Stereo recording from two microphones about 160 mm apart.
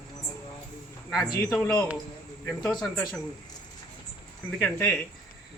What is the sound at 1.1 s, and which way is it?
A man's voice, 5° left (ahead or behind).